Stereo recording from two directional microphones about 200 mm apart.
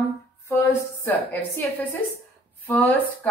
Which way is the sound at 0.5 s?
10° left (ahead or behind).